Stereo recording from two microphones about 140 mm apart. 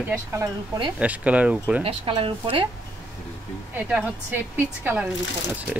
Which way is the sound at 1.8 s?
45° right (ahead or behind).